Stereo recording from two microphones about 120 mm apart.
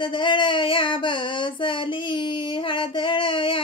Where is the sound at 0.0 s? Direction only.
40° left (ahead or behind).